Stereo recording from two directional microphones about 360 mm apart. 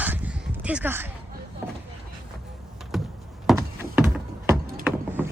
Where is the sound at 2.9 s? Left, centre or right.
Centre.